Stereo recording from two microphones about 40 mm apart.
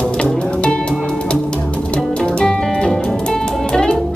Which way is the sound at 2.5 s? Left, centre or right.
Centre.